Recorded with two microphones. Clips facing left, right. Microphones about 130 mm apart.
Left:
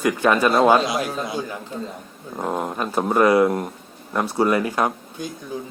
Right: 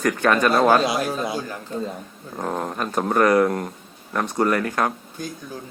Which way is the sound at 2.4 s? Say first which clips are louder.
Left 1 dB; 10° left (ahead or behind).